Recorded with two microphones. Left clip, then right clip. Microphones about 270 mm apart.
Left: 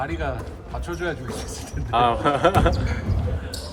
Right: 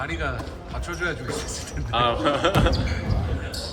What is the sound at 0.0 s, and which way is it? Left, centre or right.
Speech, centre.